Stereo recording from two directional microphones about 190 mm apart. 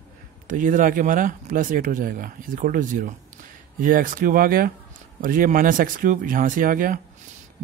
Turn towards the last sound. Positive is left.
turn(degrees=-45)  # may be behind; listen again after turning